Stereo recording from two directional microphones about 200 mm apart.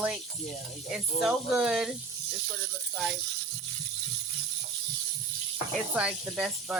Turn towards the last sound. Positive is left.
turn(degrees=-5)  # may be behind; listen again after turning